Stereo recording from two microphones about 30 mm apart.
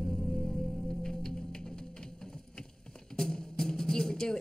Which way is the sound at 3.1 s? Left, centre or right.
Left.